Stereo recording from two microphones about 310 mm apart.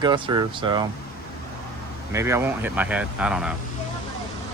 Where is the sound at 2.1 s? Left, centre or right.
Centre.